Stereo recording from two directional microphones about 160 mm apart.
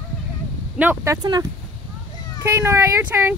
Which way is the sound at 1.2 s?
25° right (ahead or behind).